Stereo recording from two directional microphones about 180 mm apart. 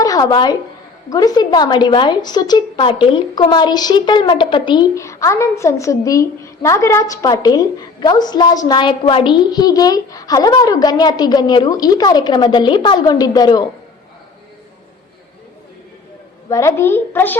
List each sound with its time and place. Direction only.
0.0 s a woman's voice: 20° left (ahead or behind)
16.5 s a woman's voice: 15° left (ahead or behind)